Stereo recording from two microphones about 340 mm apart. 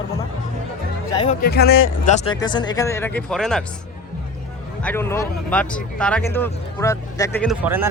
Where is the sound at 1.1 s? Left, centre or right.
Centre.